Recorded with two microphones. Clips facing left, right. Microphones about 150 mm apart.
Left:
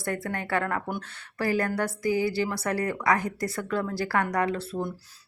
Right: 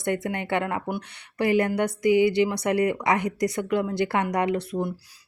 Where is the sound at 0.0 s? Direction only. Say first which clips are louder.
Right 4 dB; 20° right (ahead or behind).